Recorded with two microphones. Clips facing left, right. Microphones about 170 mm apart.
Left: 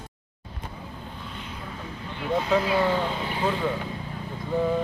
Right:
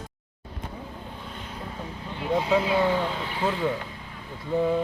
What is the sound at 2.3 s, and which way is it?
Speech, 10° right (ahead or behind).